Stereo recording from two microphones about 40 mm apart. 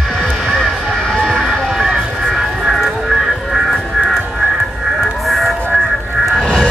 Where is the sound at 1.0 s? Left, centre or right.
Centre.